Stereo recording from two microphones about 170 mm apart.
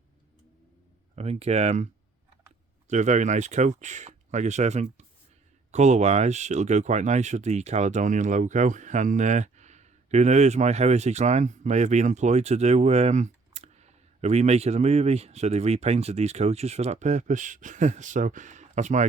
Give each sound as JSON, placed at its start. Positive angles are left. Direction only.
{"t": 1.1, "sound": "speech", "side_deg": -40}
{"t": 2.9, "sound": "speech", "side_deg": -45}